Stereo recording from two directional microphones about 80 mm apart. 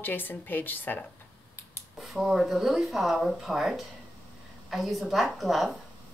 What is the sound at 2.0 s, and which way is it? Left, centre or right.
Speech, centre.